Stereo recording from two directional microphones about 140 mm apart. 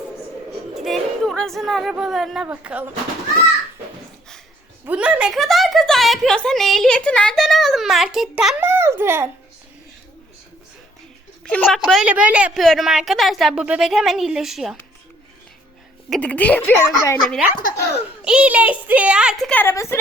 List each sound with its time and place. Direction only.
0.7 s speech: centre (ahead or behind)
4.9 s a woman's voice: 10° right (ahead or behind)
8.6 s a child's voice: 15° right (ahead or behind)
11.4 s a woman's voice: 5° left (ahead or behind)
11.9 s a woman's voice: 5° right (ahead or behind)
16.0 s speech: 5° left (ahead or behind)
17.2 s a woman's voice: centre (ahead or behind)
19.5 s a woman's voice: 10° left (ahead or behind)